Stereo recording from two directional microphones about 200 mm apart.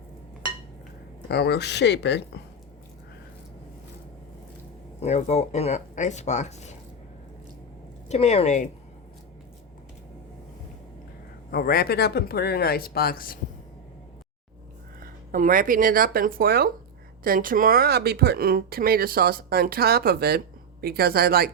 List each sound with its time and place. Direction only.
1.3 s speech: 55° left (ahead or behind)
4.9 s speech: 35° left (ahead or behind)
8.0 s speech: 35° left (ahead or behind)
11.5 s speech: 50° left (ahead or behind)
15.3 s speech: 45° right (ahead or behind)